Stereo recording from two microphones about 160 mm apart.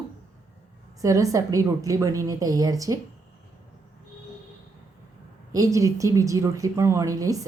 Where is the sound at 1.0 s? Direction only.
20° right (ahead or behind).